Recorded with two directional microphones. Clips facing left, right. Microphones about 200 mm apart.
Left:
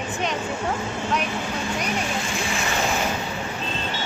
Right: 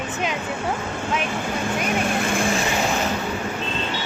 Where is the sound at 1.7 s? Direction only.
55° right (ahead or behind).